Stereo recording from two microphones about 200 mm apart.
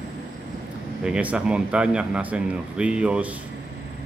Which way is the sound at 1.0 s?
5° right (ahead or behind).